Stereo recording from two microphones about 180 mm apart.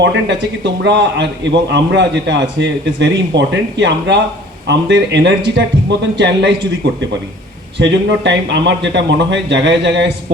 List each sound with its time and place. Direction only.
0.0 s a man's voice: 75° right (ahead or behind)
7.8 s a man's voice: 75° right (ahead or behind)